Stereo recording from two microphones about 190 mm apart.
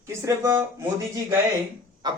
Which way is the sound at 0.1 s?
15° right (ahead or behind).